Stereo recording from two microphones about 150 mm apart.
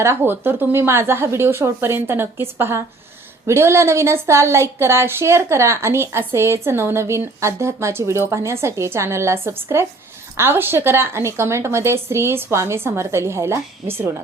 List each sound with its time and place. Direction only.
0.0 s speech: 15° right (ahead or behind)